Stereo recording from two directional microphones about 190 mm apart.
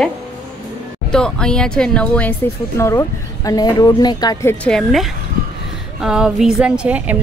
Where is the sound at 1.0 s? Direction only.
5° left (ahead or behind).